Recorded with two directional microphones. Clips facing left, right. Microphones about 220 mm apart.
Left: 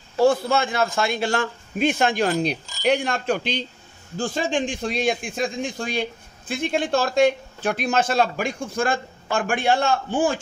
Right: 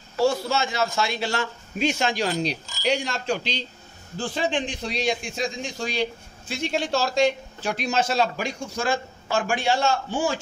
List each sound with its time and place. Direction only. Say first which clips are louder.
0.2 s a man's voice: left 4 dB; 55° left (ahead or behind)